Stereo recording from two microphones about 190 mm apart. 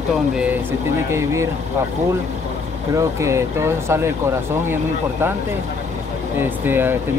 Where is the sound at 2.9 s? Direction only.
15° right (ahead or behind).